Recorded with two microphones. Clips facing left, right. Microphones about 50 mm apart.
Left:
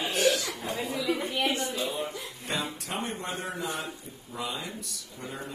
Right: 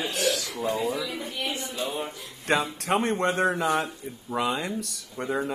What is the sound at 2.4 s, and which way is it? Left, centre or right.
Speech, right.